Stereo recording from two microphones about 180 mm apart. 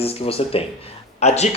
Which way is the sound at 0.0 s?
35° left (ahead or behind).